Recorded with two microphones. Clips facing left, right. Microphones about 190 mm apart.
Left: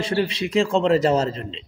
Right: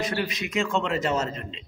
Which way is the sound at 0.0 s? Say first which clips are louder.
Left 6 dB; 30° left (ahead or behind).